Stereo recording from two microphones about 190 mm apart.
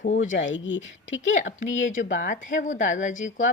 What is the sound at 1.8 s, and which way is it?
Speech, 40° left (ahead or behind).